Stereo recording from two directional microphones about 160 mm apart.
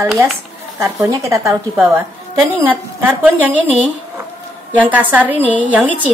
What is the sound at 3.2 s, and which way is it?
A woman's voice, 10° right (ahead or behind).